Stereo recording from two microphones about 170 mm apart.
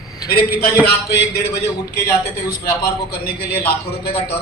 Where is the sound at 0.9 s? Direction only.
70° left (ahead or behind).